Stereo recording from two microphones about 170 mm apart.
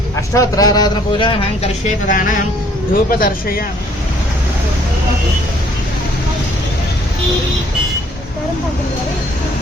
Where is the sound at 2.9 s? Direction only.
60° left (ahead or behind).